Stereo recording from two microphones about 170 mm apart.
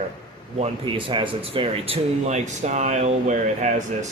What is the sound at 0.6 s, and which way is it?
Speech, 30° right (ahead or behind).